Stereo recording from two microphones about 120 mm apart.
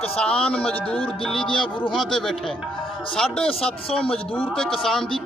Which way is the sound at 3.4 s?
50° left (ahead or behind).